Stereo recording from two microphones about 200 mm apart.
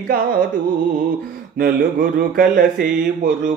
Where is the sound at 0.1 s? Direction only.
45° right (ahead or behind).